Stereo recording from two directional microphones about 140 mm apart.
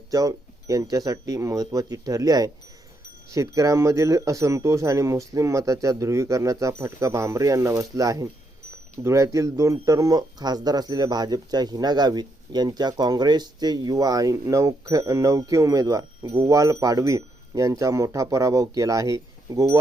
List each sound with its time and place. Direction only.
0.1 s speech: 25° right (ahead or behind)